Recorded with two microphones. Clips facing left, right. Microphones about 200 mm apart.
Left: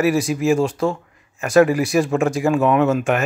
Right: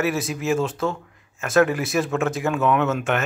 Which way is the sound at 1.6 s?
5° left (ahead or behind).